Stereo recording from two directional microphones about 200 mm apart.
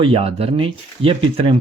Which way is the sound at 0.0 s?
30° right (ahead or behind).